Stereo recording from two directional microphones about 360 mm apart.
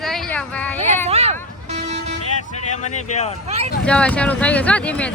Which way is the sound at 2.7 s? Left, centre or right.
Centre.